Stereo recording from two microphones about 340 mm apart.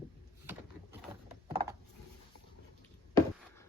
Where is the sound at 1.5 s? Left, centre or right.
Centre.